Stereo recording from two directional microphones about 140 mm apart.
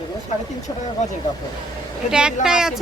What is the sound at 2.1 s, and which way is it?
Speech, 5° right (ahead or behind).